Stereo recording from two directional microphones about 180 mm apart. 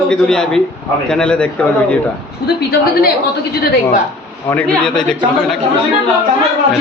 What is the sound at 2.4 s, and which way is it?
Speech, 60° left (ahead or behind).